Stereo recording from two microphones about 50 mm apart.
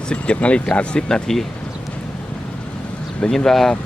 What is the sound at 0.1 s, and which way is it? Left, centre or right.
Speech, left.